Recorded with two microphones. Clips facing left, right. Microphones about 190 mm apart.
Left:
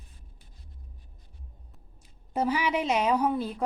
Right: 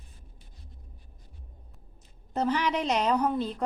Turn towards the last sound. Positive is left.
turn(degrees=10)  # may be behind; listen again after turning